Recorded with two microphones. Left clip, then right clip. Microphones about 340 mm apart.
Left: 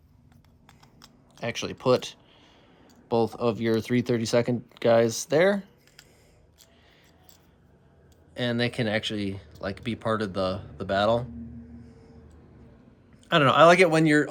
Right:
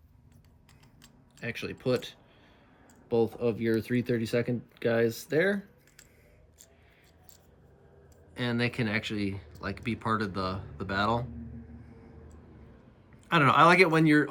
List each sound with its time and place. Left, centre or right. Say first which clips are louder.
1.4 s speech: left 5 dB; centre
8.3 s speech: left 4 dB; centre
13.2 s speech: left 4 dB; centre